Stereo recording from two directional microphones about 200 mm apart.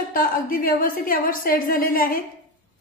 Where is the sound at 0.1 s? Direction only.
45° left (ahead or behind).